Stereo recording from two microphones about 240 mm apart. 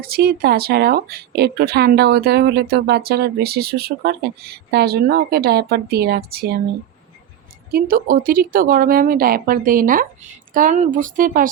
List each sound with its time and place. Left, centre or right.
0.0 s speech: right
7.7 s speech: right